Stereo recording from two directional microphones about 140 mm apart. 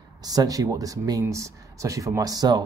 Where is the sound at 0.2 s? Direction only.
25° right (ahead or behind).